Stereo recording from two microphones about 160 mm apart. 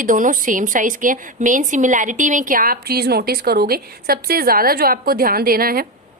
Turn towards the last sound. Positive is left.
turn(degrees=-65)  # may be behind; listen again after turning